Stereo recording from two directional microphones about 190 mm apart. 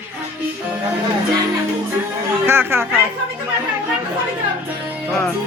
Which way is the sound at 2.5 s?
10° right (ahead or behind).